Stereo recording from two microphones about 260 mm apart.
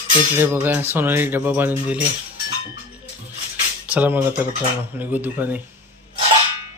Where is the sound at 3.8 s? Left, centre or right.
Centre.